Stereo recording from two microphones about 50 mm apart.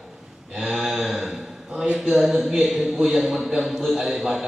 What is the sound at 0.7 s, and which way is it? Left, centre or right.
Mantra, centre.